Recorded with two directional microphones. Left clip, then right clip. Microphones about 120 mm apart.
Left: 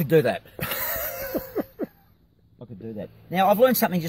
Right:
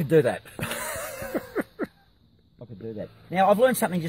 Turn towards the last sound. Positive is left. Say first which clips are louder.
# left 2 dB
turn(degrees=-25)  # may be behind; listen again after turning